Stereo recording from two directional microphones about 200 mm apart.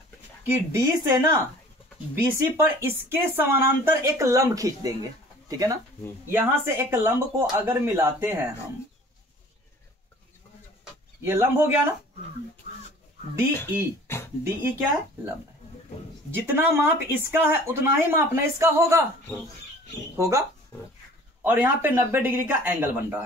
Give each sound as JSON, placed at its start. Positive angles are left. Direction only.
{"t": 0.5, "sound": "speech", "side_deg": -10}
{"t": 11.2, "sound": "speech", "side_deg": -10}
{"t": 14.1, "sound": "a sound", "side_deg": 10}
{"t": 14.4, "sound": "speech", "side_deg": -10}
{"t": 20.2, "sound": "speech", "side_deg": -15}
{"t": 20.7, "sound": "a sound", "side_deg": 15}
{"t": 21.4, "sound": "speech", "side_deg": -10}